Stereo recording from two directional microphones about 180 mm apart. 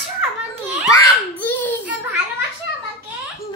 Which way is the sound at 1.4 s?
10° left (ahead or behind).